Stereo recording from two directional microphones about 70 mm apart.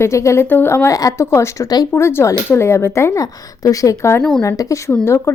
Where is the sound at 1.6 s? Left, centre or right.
Left.